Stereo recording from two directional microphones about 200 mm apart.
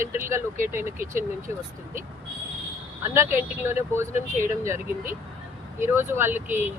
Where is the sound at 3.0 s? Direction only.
10° right (ahead or behind).